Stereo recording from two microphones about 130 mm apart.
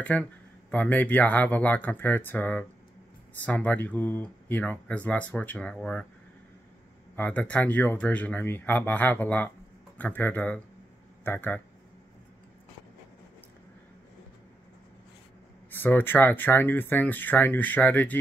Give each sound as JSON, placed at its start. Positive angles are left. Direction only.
{"t": 0.0, "sound": "speech", "side_deg": 10}
{"t": 7.2, "sound": "speech", "side_deg": 10}
{"t": 15.7, "sound": "speech", "side_deg": 15}